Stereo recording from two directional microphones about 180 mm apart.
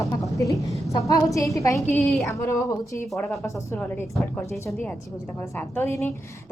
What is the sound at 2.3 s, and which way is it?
A woman's voice, 15° left (ahead or behind).